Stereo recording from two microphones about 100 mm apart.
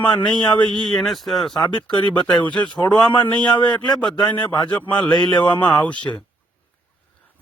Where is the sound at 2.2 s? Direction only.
45° left (ahead or behind).